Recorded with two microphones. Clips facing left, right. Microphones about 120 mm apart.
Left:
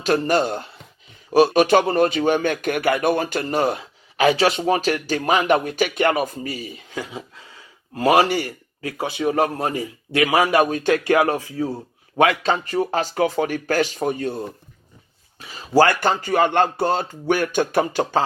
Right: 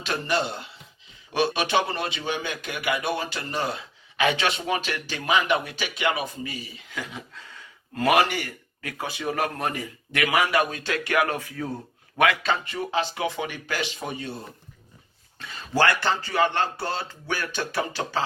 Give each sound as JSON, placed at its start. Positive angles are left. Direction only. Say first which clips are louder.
{"t": 0.0, "sound": "speech", "louder": "left 8 dB", "side_deg": 45}
{"t": 7.1, "sound": "a man's voice", "louder": "left 5 dB", "side_deg": 25}
{"t": 7.9, "sound": "speech", "louder": "left 5 dB", "side_deg": 35}
{"t": 8.4, "sound": "a sound", "louder": "left 7 dB", "side_deg": 35}
{"t": 9.0, "sound": "a man's voice", "louder": "left 7 dB", "side_deg": 20}
{"t": 10.4, "sound": "speech", "louder": "left 6 dB", "side_deg": 35}
{"t": 11.3, "sound": "a man's voice", "louder": "left 7 dB", "side_deg": 20}
{"t": 15.4, "sound": "speech", "louder": "left 7 dB", "side_deg": 35}